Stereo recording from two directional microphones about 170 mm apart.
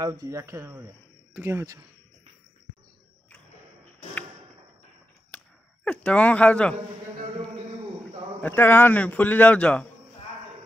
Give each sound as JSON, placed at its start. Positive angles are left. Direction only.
{"t": 0.0, "sound": "speech", "side_deg": -20}
{"t": 5.3, "sound": "a sound", "side_deg": 10}
{"t": 5.9, "sound": "speech", "side_deg": 10}
{"t": 8.4, "sound": "a man's voice", "side_deg": 10}